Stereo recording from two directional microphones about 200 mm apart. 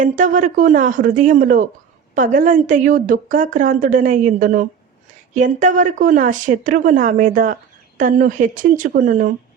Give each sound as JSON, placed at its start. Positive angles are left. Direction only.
{"t": 0.0, "sound": "a woman's voice", "side_deg": -40}